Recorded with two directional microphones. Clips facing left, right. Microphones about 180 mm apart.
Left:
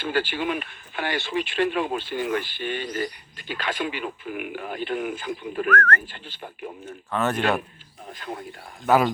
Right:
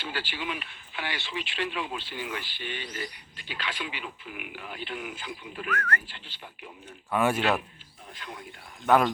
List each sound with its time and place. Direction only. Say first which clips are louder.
0.0 s speech: left 9 dB; 50° left (ahead or behind)
5.7 s speech: left 7 dB; 10° right (ahead or behind)
6.0 s speech: left 7 dB; 50° left (ahead or behind)
6.8 s speech: even; 10° right (ahead or behind)
8.1 s speech: left 8 dB; 45° left (ahead or behind)
8.9 s speech: left 2 dB; 5° left (ahead or behind)